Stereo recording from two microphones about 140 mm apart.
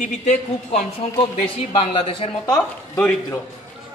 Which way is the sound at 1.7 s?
45° left (ahead or behind).